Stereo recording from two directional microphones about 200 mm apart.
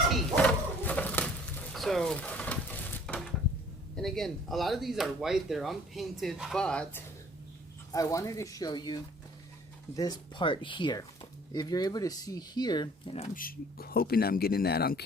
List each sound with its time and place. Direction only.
0.1 s a sound: centre (ahead or behind)
3.9 s speech: centre (ahead or behind)
7.9 s speech: 15° left (ahead or behind)
13.3 s speech: 45° left (ahead or behind)